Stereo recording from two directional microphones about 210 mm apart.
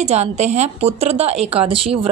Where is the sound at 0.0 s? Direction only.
30° right (ahead or behind).